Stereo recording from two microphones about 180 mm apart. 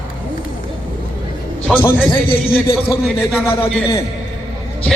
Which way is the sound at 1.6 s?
10° left (ahead or behind).